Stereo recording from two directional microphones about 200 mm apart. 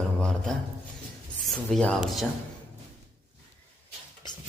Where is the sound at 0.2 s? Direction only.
5° left (ahead or behind).